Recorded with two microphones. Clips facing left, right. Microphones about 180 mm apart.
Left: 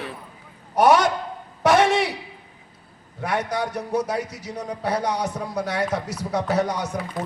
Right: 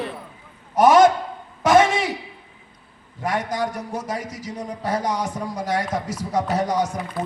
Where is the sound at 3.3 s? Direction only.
65° left (ahead or behind).